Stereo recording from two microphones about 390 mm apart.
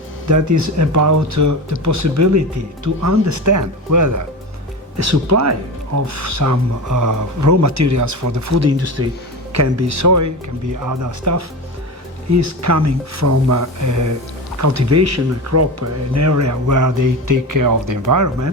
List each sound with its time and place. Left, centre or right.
0.3 s speech: right